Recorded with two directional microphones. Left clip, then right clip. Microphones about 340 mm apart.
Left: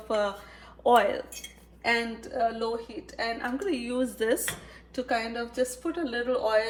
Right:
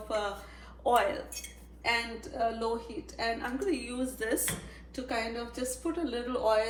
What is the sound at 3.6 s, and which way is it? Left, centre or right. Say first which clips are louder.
A woman's voice: left 4 dB; left.